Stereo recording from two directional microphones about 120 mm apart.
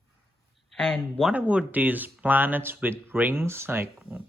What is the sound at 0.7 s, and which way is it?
Speech, 5° left (ahead or behind).